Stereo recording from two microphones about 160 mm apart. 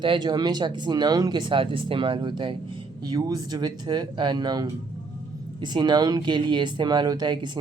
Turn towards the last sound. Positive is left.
turn(degrees=-30)  # may be behind; listen again after turning